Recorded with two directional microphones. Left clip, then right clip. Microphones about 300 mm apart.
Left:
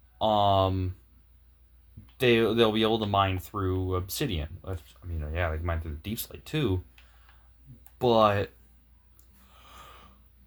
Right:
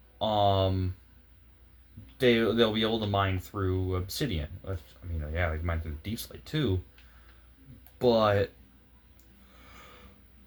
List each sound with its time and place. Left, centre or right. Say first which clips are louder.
0.2 s speech: left 3 dB; left
2.1 s speech: left 1 dB; left
7.9 s speech: left 2 dB; left